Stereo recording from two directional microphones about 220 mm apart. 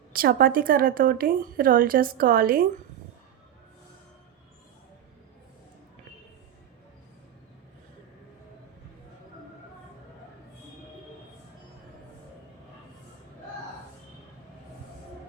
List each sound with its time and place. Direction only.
0.1 s speech: 40° right (ahead or behind)